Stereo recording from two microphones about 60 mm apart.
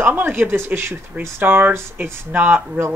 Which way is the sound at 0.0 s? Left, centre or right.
Right.